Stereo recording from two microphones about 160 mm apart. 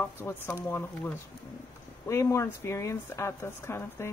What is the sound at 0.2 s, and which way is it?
Speech, 10° left (ahead or behind).